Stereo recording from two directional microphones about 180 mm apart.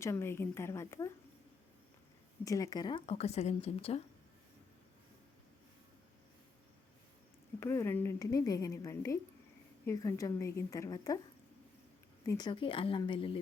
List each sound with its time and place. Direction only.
0.0 s a woman's voice: 15° left (ahead or behind)
2.4 s a woman's voice: 20° left (ahead or behind)
7.6 s a woman's voice: 15° left (ahead or behind)
12.2 s speech: 20° left (ahead or behind)